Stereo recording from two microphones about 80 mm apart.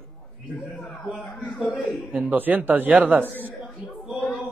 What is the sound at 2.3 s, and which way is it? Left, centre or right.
A man's voice, right.